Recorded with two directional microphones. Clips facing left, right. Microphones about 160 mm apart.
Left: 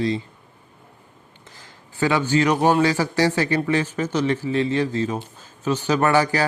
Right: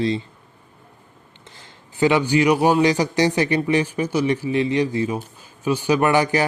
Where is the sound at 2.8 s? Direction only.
15° right (ahead or behind).